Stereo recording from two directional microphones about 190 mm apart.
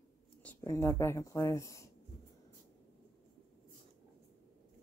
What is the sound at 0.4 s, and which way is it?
Speech, 10° left (ahead or behind).